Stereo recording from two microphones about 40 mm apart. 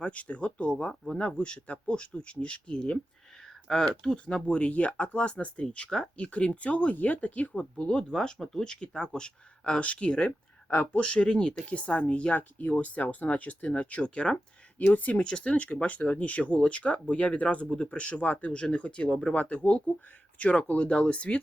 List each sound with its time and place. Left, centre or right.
0.0 s speech: left
3.4 s speech: centre
4.3 s speech: left
6.9 s speech: left
7.9 s speech: centre
12.4 s speech: left
14.0 s speech: left
14.8 s speech: left
15.2 s speech: left
18.5 s speech: left